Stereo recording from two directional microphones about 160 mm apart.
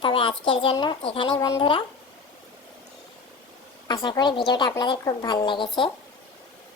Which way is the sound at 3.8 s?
30° left (ahead or behind).